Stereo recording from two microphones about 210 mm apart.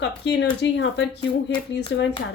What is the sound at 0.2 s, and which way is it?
A woman's voice, 55° left (ahead or behind).